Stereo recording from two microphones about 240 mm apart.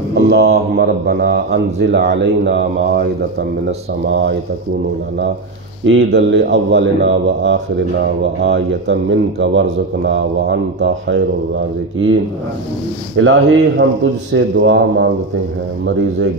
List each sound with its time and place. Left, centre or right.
0.3 s a man's voice: right
4.1 s a man's voice: right
5.9 s a man's voice: right
13.1 s a man's voice: right